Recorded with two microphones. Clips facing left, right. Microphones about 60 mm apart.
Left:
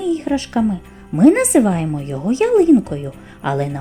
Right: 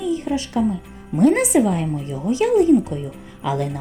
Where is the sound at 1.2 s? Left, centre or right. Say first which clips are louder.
Left 4 dB; left.